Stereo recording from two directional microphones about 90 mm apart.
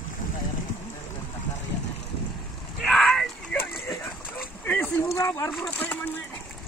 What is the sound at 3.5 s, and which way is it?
Dog, 25° left (ahead or behind).